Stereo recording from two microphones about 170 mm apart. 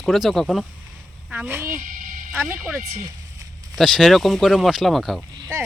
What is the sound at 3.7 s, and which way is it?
Speech, centre (ahead or behind).